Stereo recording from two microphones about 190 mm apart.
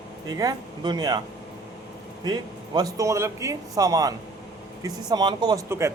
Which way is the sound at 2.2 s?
20° right (ahead or behind).